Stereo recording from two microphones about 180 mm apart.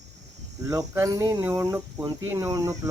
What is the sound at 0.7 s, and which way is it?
Speech, 20° right (ahead or behind).